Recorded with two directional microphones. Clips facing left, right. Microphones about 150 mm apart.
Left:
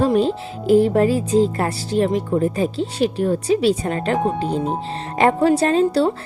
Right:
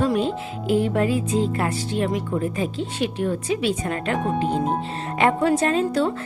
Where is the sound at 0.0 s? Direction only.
35° left (ahead or behind).